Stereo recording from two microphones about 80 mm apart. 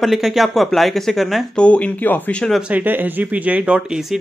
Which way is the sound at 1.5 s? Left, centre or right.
Centre.